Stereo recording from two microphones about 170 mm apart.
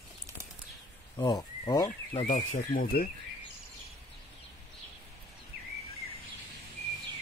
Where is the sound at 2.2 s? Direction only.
45° left (ahead or behind); by 3.1 s 60° left (ahead or behind).